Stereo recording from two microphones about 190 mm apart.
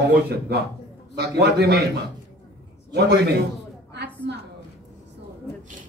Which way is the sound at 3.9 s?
65° right (ahead or behind).